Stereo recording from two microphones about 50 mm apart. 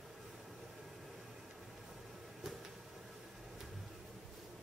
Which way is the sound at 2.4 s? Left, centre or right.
Centre.